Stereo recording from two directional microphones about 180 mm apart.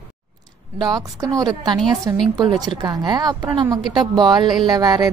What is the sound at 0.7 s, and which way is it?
Speech, 20° right (ahead or behind).